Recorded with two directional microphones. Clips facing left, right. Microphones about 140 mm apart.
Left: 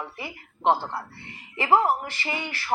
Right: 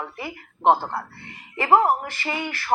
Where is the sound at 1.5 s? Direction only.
45° right (ahead or behind).